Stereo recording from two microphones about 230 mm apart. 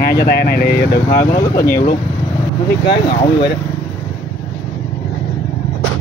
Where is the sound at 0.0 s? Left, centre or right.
Left.